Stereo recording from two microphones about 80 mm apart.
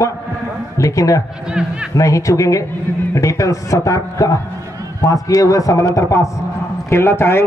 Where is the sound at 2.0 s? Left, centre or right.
Left.